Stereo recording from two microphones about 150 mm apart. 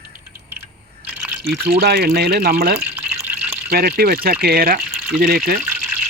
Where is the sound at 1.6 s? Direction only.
90° right.